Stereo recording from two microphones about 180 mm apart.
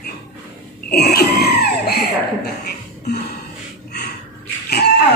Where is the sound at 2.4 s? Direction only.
65° left (ahead or behind).